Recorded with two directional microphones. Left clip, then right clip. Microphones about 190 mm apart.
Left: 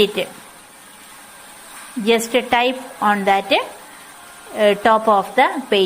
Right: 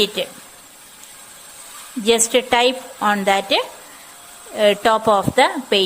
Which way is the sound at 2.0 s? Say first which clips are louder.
Right 1 dB; 35° right (ahead or behind).